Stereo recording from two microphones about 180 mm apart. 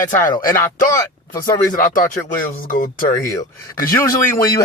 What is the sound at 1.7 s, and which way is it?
Speech, 50° left (ahead or behind).